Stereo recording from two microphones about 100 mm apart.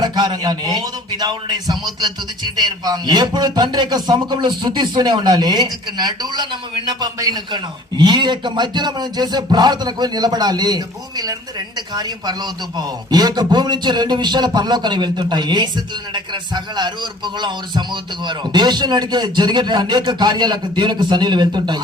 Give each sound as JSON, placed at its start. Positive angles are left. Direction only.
{"t": 0.0, "sound": "a man's voice", "side_deg": -45}